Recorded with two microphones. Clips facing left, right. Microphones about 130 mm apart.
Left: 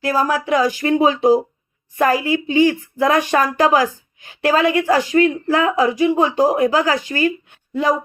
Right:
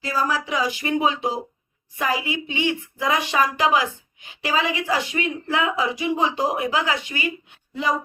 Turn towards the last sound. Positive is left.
turn(degrees=50)  # may be behind; listen again after turning